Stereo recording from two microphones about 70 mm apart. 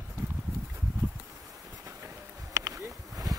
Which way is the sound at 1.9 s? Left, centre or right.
Right.